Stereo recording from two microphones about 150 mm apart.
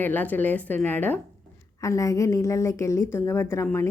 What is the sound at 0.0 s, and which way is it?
A woman's voice, 10° left (ahead or behind).